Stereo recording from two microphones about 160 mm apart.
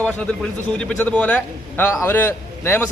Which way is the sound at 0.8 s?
10° left (ahead or behind).